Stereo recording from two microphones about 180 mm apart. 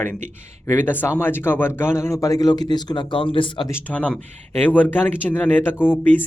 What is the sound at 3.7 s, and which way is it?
A man's voice, 10° left (ahead or behind).